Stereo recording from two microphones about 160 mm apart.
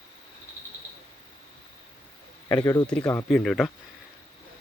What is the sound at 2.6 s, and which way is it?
Speech, 25° left (ahead or behind).